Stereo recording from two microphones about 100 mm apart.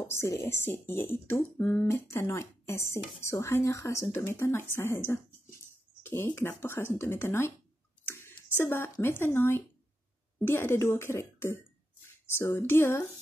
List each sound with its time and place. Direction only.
0.0 s speech: 30° left (ahead or behind)